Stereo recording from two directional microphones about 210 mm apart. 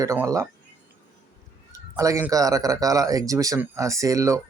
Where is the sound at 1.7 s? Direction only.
15° right (ahead or behind).